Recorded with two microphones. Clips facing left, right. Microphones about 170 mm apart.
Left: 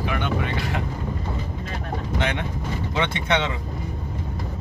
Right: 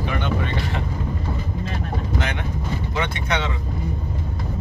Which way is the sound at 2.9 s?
25° left (ahead or behind).